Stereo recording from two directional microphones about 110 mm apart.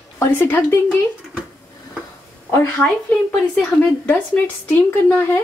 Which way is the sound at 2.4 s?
20° left (ahead or behind).